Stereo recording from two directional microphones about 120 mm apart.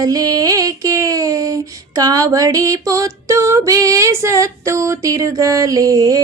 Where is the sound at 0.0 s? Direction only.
30° right (ahead or behind).